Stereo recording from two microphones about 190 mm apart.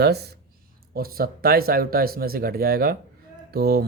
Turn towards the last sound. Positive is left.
turn(degrees=-55)  # may be behind; listen again after turning